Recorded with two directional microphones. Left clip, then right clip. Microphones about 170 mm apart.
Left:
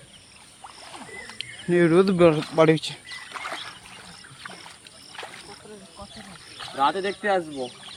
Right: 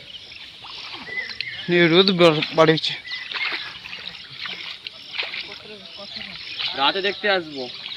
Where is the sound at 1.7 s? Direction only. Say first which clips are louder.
Right 3 dB; 5° left (ahead or behind).